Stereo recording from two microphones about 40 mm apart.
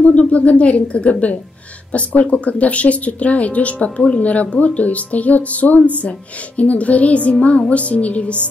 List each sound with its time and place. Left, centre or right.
0.0 s speech: left